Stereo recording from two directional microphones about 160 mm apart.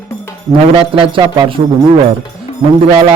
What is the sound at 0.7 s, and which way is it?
A man's voice, 25° right (ahead or behind).